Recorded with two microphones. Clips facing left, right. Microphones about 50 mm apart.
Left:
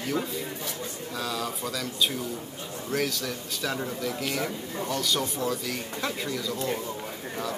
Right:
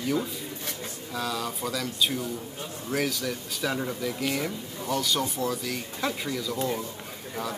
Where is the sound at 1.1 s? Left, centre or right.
Centre.